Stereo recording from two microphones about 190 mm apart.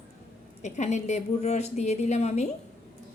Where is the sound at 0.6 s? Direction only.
35° left (ahead or behind).